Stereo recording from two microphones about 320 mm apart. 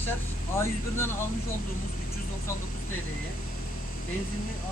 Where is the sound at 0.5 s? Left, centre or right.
Centre.